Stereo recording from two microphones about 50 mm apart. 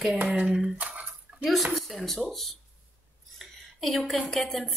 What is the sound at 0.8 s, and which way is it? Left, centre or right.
Dishes, right.